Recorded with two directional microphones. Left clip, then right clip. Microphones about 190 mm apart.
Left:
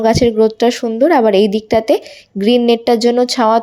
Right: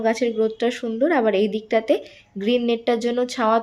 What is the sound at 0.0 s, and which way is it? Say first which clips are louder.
A woman's voice: left 9 dB; 35° left (ahead or behind).